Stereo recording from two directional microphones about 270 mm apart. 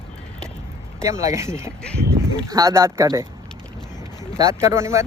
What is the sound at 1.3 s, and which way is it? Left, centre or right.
Speech, centre.